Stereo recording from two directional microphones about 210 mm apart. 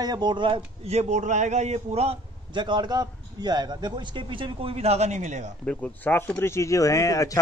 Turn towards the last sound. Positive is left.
turn(degrees=15)  # may be behind; listen again after turning